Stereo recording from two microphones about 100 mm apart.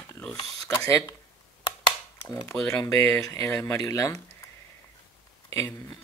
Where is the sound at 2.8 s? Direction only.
25° left (ahead or behind).